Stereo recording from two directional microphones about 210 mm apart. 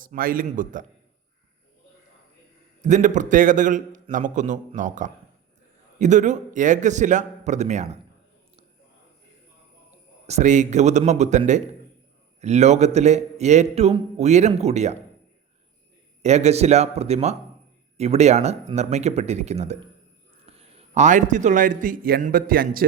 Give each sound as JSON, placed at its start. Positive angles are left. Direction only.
{"t": 0.0, "sound": "a man's voice", "side_deg": -40}
{"t": 2.8, "sound": "a man's voice", "side_deg": -35}
{"t": 10.2, "sound": "a man's voice", "side_deg": -35}
{"t": 16.2, "sound": "a man's voice", "side_deg": -30}